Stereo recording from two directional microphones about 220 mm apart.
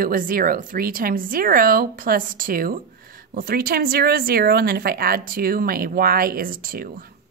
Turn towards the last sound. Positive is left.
turn(degrees=-40)  # may be behind; listen again after turning